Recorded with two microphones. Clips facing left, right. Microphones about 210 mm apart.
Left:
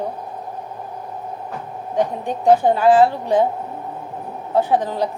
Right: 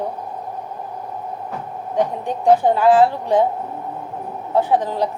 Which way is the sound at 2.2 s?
15° left (ahead or behind).